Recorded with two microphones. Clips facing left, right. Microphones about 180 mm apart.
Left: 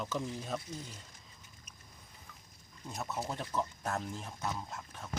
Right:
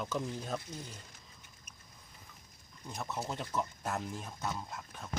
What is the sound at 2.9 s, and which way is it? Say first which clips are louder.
Speech: even; 5° left (ahead or behind).